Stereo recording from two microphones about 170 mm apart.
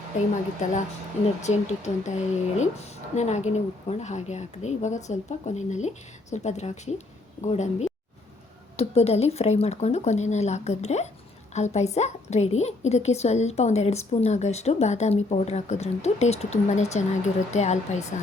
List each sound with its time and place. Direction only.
1.4 s a woman's voice: 40° left (ahead or behind)